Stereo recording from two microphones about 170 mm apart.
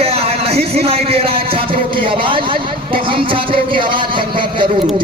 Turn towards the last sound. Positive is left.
turn(degrees=-30)  # may be behind; listen again after turning